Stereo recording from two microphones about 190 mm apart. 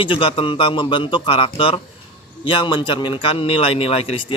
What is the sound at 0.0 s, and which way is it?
A man's voice, 30° left (ahead or behind).